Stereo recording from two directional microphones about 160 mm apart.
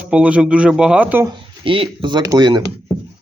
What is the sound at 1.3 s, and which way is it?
Speech, 30° right (ahead or behind).